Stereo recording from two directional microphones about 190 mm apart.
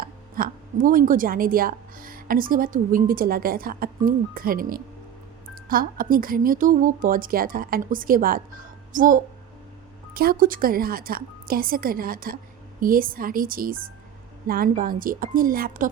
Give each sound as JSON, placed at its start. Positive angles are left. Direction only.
{"t": 0.0, "sound": "a woman's voice", "side_deg": -50}